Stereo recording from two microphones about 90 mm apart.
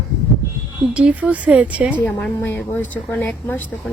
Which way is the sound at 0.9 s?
15° right (ahead or behind).